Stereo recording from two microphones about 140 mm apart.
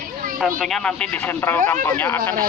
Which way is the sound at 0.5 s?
Centre (ahead or behind).